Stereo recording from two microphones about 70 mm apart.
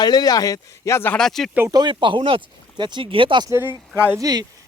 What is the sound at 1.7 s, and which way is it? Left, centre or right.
Speech, right.